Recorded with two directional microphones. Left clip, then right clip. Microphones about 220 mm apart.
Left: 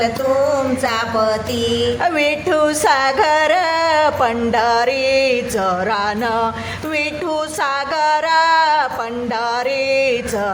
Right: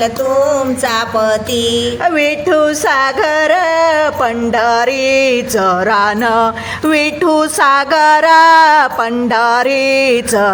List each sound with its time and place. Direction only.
1.1 s music: 35° right (ahead or behind)
2.0 s music: 15° right (ahead or behind); by 10.5 s 35° right (ahead or behind)